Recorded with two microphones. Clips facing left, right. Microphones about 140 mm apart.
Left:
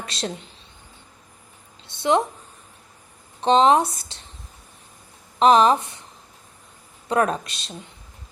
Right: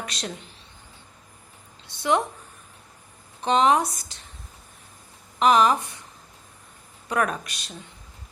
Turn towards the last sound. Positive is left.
turn(degrees=25)  # may be behind; listen again after turning